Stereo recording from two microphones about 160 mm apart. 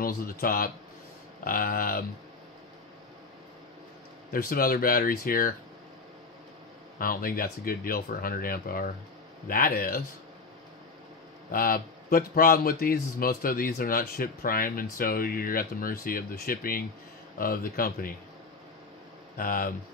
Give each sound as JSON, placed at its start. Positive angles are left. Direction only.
{"t": 0.0, "sound": "speech", "side_deg": 65}
{"t": 4.3, "sound": "speech", "side_deg": 65}
{"t": 7.0, "sound": "speech", "side_deg": 65}
{"t": 11.5, "sound": "speech", "side_deg": 65}
{"t": 19.3, "sound": "speech", "side_deg": 60}